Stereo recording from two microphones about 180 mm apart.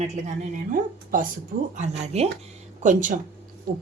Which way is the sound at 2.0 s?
35° right (ahead or behind).